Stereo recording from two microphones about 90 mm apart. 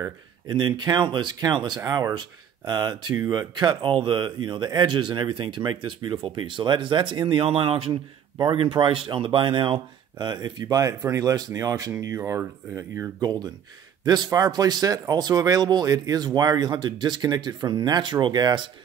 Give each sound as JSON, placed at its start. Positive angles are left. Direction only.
{"t": 0.5, "sound": "speech", "side_deg": -60}
{"t": 8.4, "sound": "speech", "side_deg": -65}
{"t": 12.2, "sound": "speech", "side_deg": -25}
{"t": 13.2, "sound": "speech", "side_deg": -50}